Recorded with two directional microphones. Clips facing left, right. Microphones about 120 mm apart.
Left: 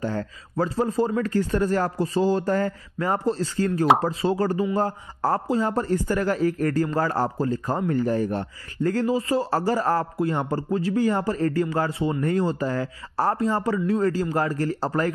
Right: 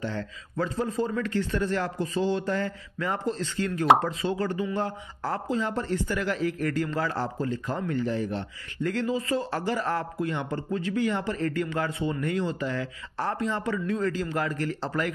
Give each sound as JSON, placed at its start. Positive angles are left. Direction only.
{"t": 0.0, "sound": "a man's voice", "side_deg": 40}